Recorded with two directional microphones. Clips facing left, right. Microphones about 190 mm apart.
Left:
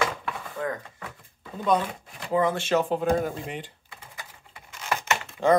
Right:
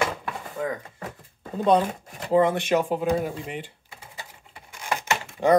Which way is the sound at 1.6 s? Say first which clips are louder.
Right 4 dB; 30° right (ahead or behind).